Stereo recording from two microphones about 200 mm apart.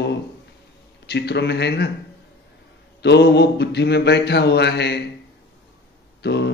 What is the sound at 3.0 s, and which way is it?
Mantra, 55° left (ahead or behind).